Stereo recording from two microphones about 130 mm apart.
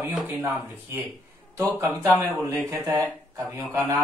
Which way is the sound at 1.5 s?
25° right (ahead or behind).